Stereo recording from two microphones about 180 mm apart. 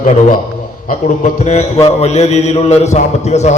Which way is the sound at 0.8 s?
45° left (ahead or behind).